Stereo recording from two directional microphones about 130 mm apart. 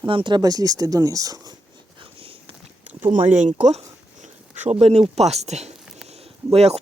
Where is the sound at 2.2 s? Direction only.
45° right (ahead or behind).